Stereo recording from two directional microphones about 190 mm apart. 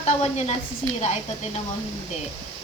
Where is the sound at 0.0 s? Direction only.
35° left (ahead or behind).